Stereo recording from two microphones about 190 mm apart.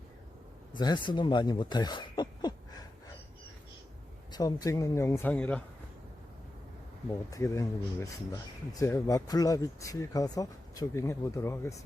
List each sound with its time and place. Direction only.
0.7 s speech: 25° left (ahead or behind)
4.3 s speech: 20° left (ahead or behind)
7.1 s speech: 15° left (ahead or behind)